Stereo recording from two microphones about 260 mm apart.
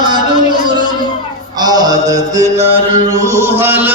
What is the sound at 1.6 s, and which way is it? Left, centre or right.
Music, centre.